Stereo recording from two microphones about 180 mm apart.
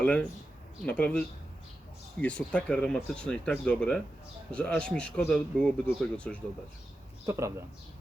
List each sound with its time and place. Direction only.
0.0 s speech: 5° left (ahead or behind)
2.2 s speech: 5° left (ahead or behind)
7.3 s speech: 15° right (ahead or behind)